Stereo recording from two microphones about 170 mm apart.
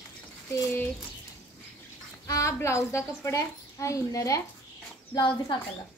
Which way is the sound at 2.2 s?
20° left (ahead or behind).